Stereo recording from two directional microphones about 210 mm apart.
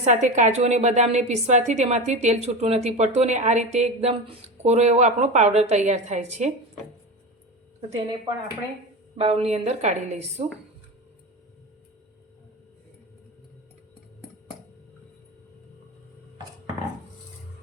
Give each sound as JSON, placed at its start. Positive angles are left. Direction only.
{"t": 0.0, "sound": "a woman's voice", "side_deg": -35}
{"t": 9.1, "sound": "a woman's voice", "side_deg": -30}